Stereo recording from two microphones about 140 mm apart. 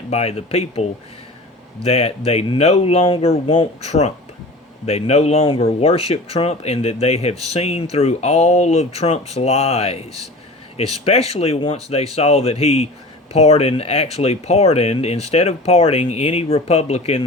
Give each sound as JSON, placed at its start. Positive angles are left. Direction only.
{"t": 0.1, "sound": "speech", "side_deg": 50}